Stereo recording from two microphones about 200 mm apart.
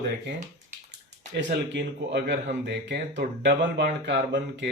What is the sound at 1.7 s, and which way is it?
Speech, 60° right (ahead or behind).